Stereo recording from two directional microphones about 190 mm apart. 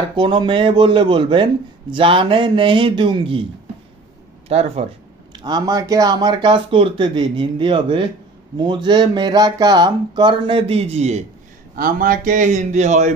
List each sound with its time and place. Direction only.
0.1 s speech: 25° right (ahead or behind)
4.5 s a man's voice: 35° right (ahead or behind)
5.3 s speech: 20° right (ahead or behind)
11.7 s a man's voice: 50° right (ahead or behind)